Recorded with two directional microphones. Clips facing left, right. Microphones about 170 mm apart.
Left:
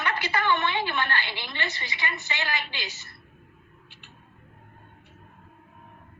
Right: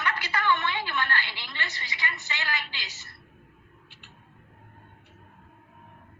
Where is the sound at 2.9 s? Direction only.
40° right (ahead or behind).